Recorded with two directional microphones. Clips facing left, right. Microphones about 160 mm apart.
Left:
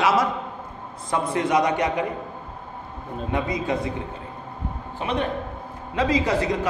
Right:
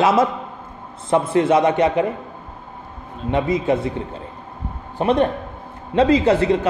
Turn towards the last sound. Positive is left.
turn(degrees=-30)  # may be behind; listen again after turning